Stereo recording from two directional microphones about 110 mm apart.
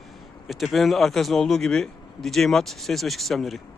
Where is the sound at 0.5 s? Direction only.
Centre (ahead or behind).